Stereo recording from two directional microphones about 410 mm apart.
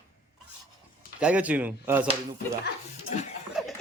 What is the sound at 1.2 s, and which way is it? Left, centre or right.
Speech, centre.